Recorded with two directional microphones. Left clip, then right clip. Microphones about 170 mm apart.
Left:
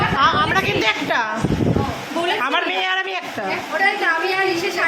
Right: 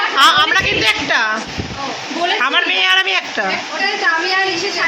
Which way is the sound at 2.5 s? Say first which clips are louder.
Right 5 dB; 10° left (ahead or behind).